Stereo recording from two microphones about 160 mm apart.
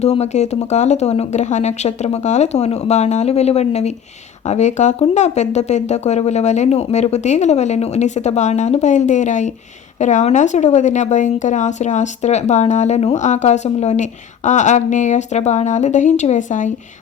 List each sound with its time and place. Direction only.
0.0 s a woman's voice: 40° left (ahead or behind)